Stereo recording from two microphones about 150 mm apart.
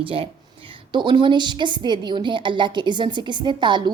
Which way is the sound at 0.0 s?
35° right (ahead or behind).